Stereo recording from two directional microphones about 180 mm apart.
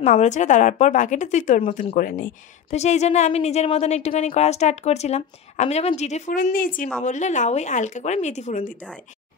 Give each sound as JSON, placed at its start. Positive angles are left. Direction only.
{"t": 0.0, "sound": "speech", "side_deg": 45}